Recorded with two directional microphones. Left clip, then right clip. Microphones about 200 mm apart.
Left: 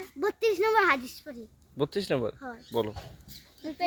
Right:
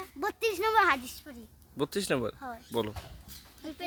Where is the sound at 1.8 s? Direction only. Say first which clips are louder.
Left 2 dB; 20° right (ahead or behind).